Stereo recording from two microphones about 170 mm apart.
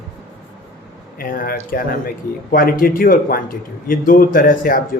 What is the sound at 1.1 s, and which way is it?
A man's voice, 55° left (ahead or behind).